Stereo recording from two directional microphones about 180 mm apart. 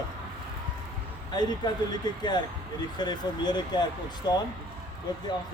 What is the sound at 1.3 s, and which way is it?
Speech, 25° left (ahead or behind).